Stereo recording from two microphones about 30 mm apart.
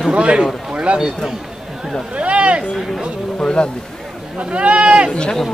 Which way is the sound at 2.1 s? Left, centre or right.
Right.